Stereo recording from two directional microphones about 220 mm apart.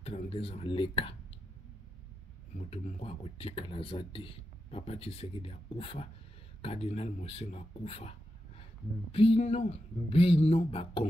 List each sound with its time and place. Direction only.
0.0 s speech: 25° left (ahead or behind)
2.5 s speech: 30° left (ahead or behind)